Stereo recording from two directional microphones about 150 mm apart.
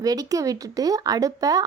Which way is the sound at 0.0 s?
25° right (ahead or behind).